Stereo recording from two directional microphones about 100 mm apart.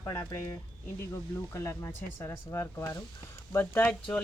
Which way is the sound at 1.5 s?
25° left (ahead or behind).